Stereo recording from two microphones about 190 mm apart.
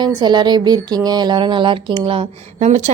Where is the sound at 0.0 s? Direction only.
25° right (ahead or behind).